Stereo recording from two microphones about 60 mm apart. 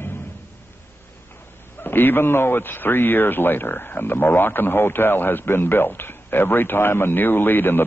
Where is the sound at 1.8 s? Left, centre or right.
Left.